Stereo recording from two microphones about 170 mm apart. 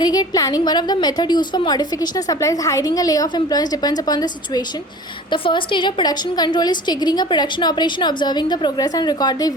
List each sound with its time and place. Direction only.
0.0 s a woman's voice: 25° left (ahead or behind)